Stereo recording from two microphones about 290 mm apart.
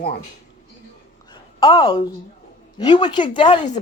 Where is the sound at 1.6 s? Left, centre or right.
Centre.